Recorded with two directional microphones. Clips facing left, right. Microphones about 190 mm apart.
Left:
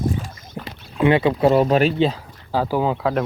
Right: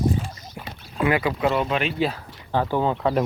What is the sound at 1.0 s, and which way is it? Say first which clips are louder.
Speech: left 6 dB; 25° left (ahead or behind).